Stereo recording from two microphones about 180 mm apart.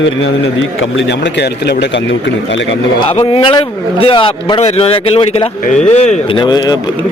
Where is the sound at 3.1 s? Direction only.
30° left (ahead or behind).